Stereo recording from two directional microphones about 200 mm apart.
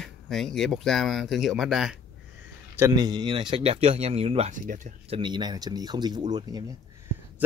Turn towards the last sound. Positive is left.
turn(degrees=-20)  # may be behind; listen again after turning